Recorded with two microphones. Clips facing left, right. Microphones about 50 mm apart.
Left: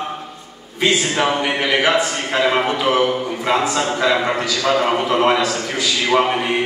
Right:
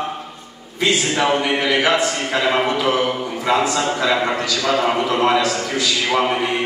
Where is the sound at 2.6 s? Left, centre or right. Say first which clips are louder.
Left 1 dB; left.